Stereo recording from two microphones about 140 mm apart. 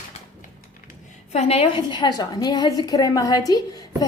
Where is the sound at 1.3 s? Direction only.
50° left (ahead or behind).